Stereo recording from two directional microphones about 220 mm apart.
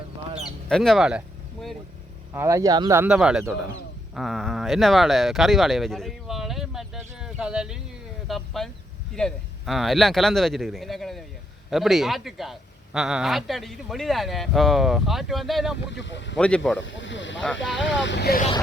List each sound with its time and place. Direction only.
0.7 s a man's voice: centre (ahead or behind)
2.3 s a man's voice: 10° right (ahead or behind)
15.9 s speech: 55° left (ahead or behind)
16.4 s a man's voice: 5° left (ahead or behind)
16.8 s speech: 55° left (ahead or behind)